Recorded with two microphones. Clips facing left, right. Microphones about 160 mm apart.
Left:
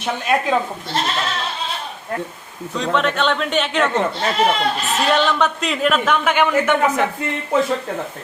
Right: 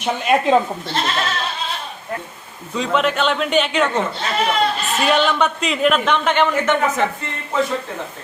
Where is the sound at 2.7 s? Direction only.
5° right (ahead or behind).